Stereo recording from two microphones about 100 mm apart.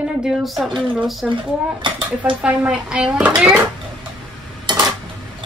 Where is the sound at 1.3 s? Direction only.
55° right (ahead or behind).